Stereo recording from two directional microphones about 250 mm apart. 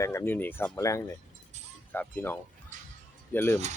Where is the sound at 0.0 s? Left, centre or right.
Centre.